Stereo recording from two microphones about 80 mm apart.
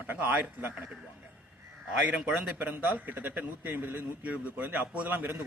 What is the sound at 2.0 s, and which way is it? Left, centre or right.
A man's voice, centre.